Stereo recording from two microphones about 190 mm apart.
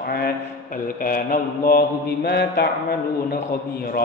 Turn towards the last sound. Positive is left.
turn(degrees=55)  # may be behind; listen again after turning